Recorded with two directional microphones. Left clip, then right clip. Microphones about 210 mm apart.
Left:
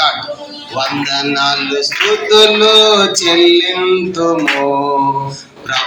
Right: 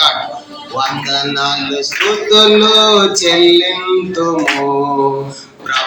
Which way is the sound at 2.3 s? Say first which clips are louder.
Even; 55° left (ahead or behind).